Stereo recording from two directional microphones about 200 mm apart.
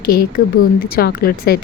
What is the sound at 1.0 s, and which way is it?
Speech, 50° left (ahead or behind).